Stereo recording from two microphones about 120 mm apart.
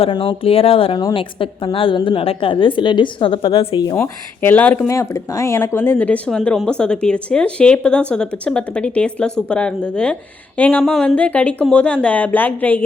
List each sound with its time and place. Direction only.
0.1 s a woman's voice: 45° left (ahead or behind)
3.9 s speech: 20° left (ahead or behind)
4.9 s speech: 25° left (ahead or behind)